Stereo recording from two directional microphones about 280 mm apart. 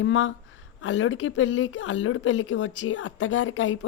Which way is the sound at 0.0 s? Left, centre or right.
Left.